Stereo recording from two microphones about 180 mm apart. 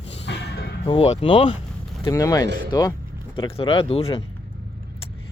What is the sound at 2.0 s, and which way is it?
Speech, 20° left (ahead or behind).